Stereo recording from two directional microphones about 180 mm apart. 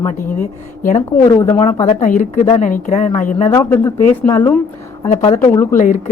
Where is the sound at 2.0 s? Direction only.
45° left (ahead or behind).